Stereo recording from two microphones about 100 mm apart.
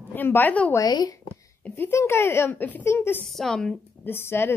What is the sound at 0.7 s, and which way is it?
Speech, 40° left (ahead or behind).